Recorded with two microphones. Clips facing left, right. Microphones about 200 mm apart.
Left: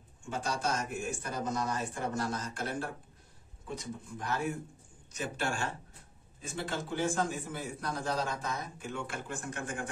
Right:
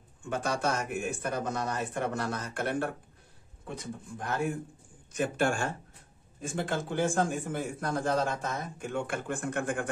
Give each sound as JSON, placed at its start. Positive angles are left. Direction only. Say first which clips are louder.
{"t": 0.3, "sound": "a man's voice", "louder": "right 4 dB", "side_deg": -60}